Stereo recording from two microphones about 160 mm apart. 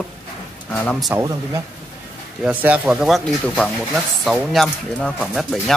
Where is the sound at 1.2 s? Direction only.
20° right (ahead or behind).